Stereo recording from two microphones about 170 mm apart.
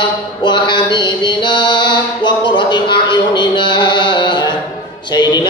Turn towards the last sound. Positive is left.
turn(degrees=25)  # may be behind; listen again after turning